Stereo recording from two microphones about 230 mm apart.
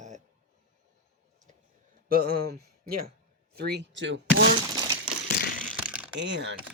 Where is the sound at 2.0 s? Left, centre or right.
Right.